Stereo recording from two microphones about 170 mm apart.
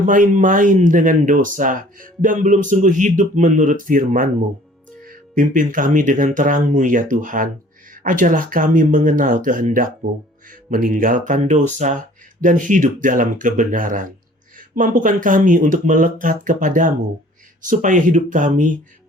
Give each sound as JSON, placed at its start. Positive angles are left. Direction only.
{"t": 0.0, "sound": "speech", "side_deg": -50}